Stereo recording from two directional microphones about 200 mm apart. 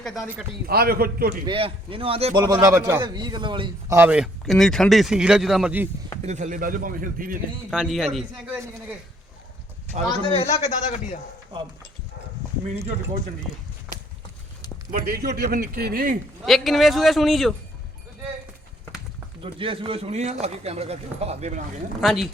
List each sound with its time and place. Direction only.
0.0 s speech: centre (ahead or behind)
0.7 s speech: 50° right (ahead or behind)
1.5 s a man's voice: 25° right (ahead or behind)
3.9 s speech: 10° right (ahead or behind)
6.2 s speech: 35° right (ahead or behind)
7.7 s speech: centre (ahead or behind)
8.5 s speech: 10° right (ahead or behind)
10.3 s a man's voice: 30° left (ahead or behind)
14.9 s speech: 50° right (ahead or behind)
16.4 s speech: centre (ahead or behind)
19.4 s speech: 25° right (ahead or behind)
22.0 s speech: centre (ahead or behind)